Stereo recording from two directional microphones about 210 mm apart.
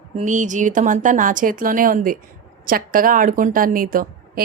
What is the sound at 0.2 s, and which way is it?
A woman's voice, 35° right (ahead or behind).